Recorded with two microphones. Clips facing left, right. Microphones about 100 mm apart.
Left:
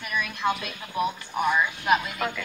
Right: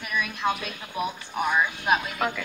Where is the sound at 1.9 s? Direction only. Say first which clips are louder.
Left 1 dB; 5° right (ahead or behind).